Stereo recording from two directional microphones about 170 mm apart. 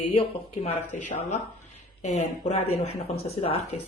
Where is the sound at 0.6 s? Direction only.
45° left (ahead or behind).